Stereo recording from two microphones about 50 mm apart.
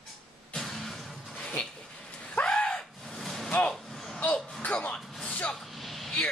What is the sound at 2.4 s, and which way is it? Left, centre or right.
Gasp, left.